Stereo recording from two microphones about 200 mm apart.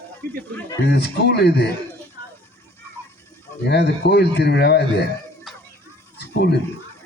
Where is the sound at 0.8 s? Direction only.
55° left (ahead or behind).